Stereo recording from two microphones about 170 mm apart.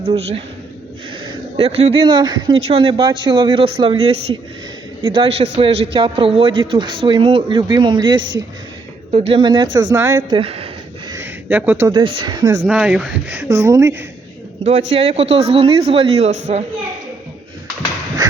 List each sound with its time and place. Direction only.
0.1 s speech: 35° right (ahead or behind)
1.5 s speech: 35° right (ahead or behind)
8.1 s a woman's voice: 90° right
9.1 s a woman's voice: 35° right (ahead or behind)
11.1 s a sound: 15° right (ahead or behind)
11.9 s a woman's voice: 30° right (ahead or behind)
12.6 s speech: 5° right (ahead or behind)
14.6 s speech: 40° right (ahead or behind)